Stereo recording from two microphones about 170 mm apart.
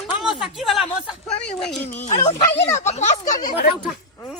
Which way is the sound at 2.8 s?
40° left (ahead or behind).